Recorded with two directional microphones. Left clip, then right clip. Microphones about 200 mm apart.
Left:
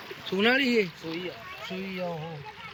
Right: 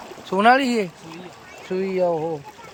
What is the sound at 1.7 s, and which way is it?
Speech, 90° right.